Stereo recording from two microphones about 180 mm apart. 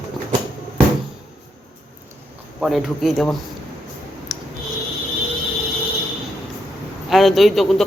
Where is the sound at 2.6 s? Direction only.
Centre (ahead or behind).